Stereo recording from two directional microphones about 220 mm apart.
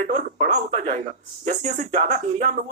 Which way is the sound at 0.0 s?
30° right (ahead or behind).